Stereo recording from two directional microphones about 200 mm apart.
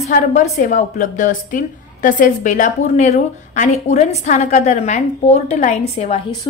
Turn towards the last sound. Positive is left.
turn(degrees=30)  # may be behind; listen again after turning